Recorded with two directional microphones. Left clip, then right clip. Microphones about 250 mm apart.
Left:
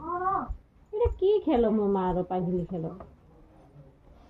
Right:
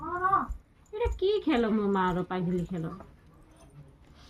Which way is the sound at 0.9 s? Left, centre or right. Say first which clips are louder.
Left 4 dB; centre.